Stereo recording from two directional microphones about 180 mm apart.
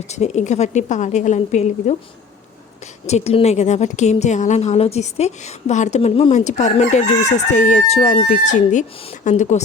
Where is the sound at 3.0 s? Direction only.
35° left (ahead or behind).